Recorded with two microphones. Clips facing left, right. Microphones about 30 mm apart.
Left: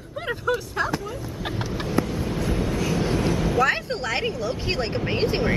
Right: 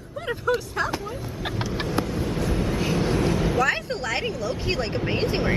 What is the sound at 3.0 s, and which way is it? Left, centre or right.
Vehicle, centre.